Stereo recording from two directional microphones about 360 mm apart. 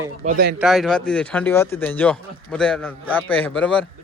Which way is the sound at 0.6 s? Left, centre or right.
Centre.